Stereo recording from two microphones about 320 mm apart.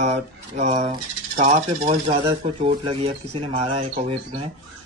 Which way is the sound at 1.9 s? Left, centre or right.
Centre.